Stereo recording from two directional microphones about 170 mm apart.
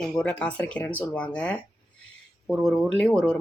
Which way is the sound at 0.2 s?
5° left (ahead or behind).